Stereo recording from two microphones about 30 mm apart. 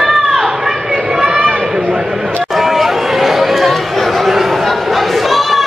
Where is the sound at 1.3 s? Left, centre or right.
Right.